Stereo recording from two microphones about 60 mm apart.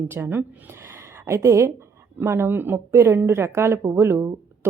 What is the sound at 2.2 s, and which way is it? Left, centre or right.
Speech, right.